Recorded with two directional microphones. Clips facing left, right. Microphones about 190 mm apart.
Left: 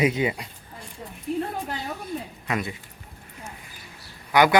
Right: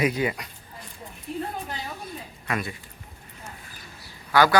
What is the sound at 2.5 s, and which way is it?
Speech, 20° left (ahead or behind).